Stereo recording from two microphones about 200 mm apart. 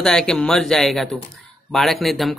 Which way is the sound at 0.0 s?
5° left (ahead or behind).